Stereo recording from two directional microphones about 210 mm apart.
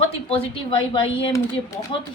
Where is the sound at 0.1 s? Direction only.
25° left (ahead or behind).